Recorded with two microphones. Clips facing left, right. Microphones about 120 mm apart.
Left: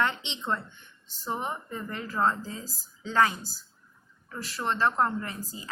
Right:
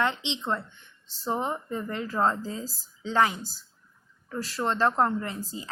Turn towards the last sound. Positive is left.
turn(degrees=-30)  # may be behind; listen again after turning